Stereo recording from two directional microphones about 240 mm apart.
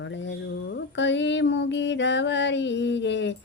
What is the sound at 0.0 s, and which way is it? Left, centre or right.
Speech, left.